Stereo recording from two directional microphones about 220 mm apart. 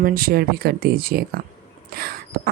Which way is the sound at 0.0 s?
40° right (ahead or behind).